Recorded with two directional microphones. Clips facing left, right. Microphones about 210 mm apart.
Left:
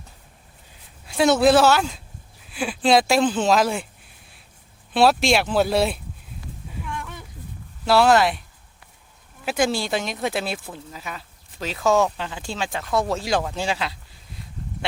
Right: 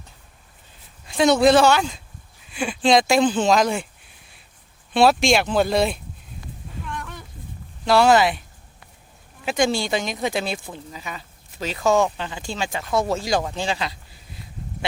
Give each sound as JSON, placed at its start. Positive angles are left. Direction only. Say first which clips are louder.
{"t": 1.0, "sound": "speech", "louder": "right 1 dB", "side_deg": 5}
{"t": 4.9, "sound": "speech", "louder": "right 1 dB", "side_deg": 0}
{"t": 6.7, "sound": "a sound", "louder": "even", "side_deg": 10}
{"t": 7.9, "sound": "speech", "louder": "right 1 dB", "side_deg": 0}